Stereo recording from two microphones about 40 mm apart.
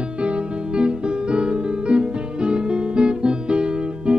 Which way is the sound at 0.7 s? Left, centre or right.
Right.